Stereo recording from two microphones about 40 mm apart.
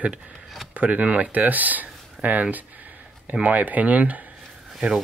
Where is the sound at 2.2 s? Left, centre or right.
Right.